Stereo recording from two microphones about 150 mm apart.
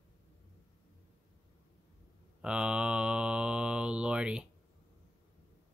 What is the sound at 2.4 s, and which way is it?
Mantra, 5° right (ahead or behind).